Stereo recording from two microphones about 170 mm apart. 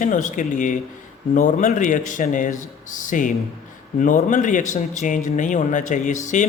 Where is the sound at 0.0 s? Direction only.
50° left (ahead or behind).